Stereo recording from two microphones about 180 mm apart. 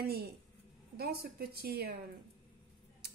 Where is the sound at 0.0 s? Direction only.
60° right (ahead or behind).